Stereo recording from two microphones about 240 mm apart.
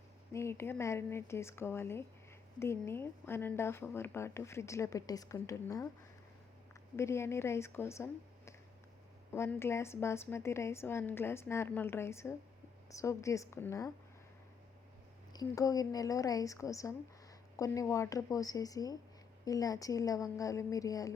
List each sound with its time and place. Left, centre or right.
0.3 s speech: centre
6.9 s speech: centre
15.3 s speech: centre